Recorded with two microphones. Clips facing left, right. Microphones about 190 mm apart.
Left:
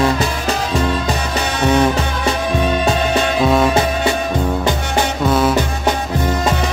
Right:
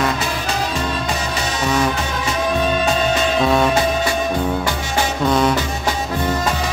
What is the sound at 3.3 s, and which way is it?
Music, centre (ahead or behind).